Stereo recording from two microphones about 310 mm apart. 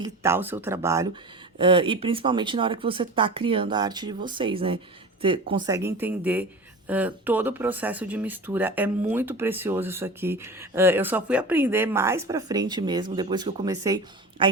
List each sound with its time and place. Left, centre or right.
0.0 s speech: centre